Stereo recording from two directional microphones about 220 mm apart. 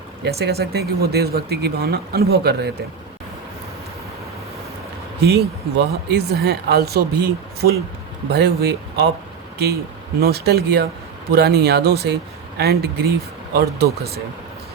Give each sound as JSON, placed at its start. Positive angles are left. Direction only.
{"t": 0.3, "sound": "speech", "side_deg": -45}
{"t": 5.7, "sound": "speech", "side_deg": -50}
{"t": 10.2, "sound": "speech", "side_deg": -45}